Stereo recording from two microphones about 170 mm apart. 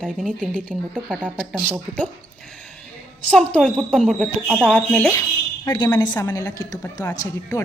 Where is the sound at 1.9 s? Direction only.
5° left (ahead or behind).